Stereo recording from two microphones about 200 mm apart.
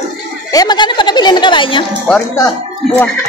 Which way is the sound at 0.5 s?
20° left (ahead or behind).